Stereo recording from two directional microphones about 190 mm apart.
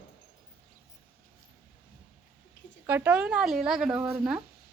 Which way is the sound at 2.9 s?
10° right (ahead or behind).